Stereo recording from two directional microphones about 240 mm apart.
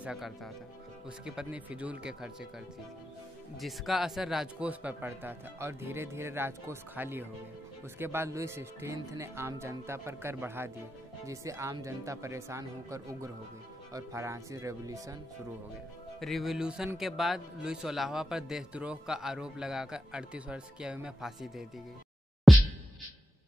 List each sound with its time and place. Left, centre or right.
0.0 s a man's voice: centre
3.5 s a man's voice: centre
16.2 s a man's voice: centre
22.5 s a sound: centre